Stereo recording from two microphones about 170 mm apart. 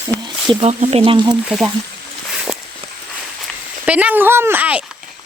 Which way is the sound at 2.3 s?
Centre (ahead or behind).